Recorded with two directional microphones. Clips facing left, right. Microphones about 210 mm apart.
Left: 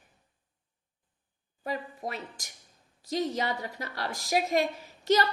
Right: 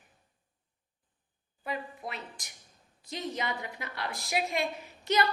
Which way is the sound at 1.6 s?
40° left (ahead or behind).